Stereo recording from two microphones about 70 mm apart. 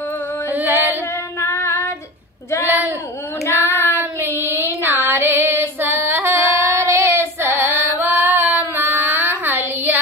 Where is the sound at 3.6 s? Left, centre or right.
Left.